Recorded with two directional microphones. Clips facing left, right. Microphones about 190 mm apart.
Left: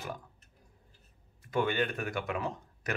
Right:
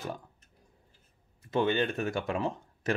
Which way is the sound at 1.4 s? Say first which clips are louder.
Right 3 dB; 25° right (ahead or behind).